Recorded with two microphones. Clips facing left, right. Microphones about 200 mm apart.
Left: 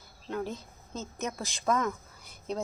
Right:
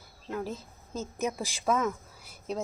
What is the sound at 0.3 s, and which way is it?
Speech, 5° right (ahead or behind).